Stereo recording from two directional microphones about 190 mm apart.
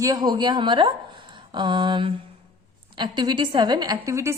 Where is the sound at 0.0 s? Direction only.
20° right (ahead or behind).